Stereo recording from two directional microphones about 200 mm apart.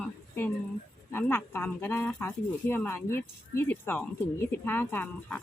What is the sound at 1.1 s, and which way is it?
Speech, 10° left (ahead or behind).